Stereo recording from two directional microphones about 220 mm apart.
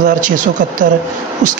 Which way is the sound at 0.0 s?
35° right (ahead or behind).